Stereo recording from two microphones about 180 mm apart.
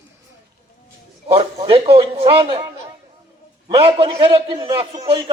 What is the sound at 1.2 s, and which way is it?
A man's voice, 30° right (ahead or behind).